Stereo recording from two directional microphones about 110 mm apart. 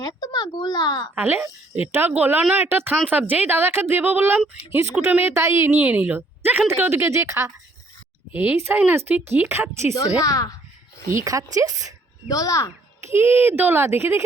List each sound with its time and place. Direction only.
0.0 s speech: 35° left (ahead or behind)
1.1 s a woman's voice: 20° right (ahead or behind)
8.3 s a woman's voice: 15° right (ahead or behind)
10.2 s a child's voice: 35° left (ahead or behind)
11.1 s a woman's voice: 30° right (ahead or behind)
12.3 s a child's voice: 30° left (ahead or behind)
13.1 s a woman's voice: 20° right (ahead or behind)